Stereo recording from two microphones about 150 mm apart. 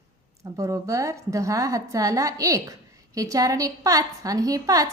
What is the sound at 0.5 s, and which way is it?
A woman's voice, 20° right (ahead or behind).